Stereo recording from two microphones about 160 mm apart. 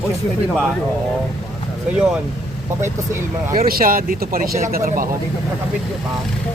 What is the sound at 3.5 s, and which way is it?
Speech, 65° right (ahead or behind).